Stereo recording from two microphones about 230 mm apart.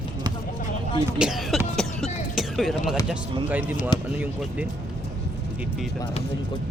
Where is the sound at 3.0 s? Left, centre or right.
Centre.